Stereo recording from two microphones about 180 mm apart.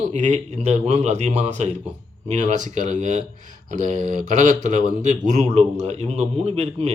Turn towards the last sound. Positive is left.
turn(degrees=-35)  # may be behind; listen again after turning